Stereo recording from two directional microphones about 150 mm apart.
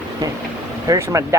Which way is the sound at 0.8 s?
20° right (ahead or behind).